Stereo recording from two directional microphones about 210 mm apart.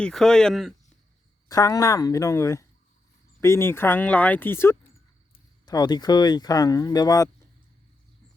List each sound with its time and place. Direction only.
0.0 s speech: centre (ahead or behind)
1.5 s speech: 15° left (ahead or behind)